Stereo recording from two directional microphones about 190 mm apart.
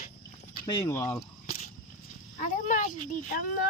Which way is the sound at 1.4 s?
35° left (ahead or behind).